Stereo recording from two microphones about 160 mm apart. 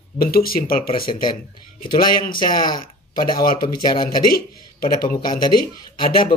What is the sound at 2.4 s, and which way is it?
Speech, 30° left (ahead or behind).